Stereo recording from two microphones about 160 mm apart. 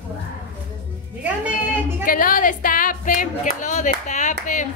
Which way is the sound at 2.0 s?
60° left (ahead or behind).